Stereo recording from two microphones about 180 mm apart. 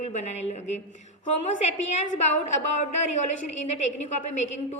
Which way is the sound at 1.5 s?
40° left (ahead or behind).